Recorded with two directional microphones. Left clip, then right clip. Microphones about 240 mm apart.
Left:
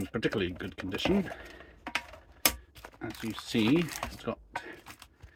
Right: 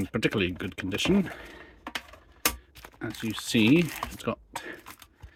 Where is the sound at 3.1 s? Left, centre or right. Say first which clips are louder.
Right 5 dB; centre.